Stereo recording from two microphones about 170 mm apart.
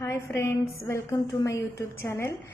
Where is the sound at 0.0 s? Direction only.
15° left (ahead or behind).